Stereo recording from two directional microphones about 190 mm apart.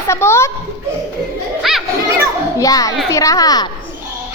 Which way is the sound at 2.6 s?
20° left (ahead or behind).